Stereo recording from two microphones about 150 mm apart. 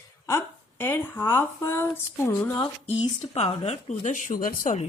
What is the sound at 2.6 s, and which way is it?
A woman's voice, 40° left (ahead or behind).